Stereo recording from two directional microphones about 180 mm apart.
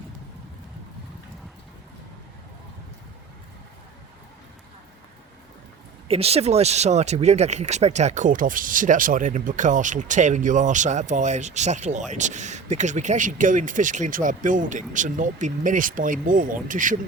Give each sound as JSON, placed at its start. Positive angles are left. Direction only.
{"t": 6.1, "sound": "speech", "side_deg": -35}